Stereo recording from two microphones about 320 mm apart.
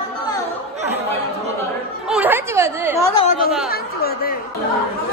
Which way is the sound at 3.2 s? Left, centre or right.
Left.